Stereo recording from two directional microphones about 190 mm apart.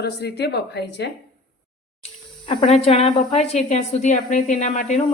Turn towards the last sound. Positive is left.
turn(degrees=40)  # may be behind; listen again after turning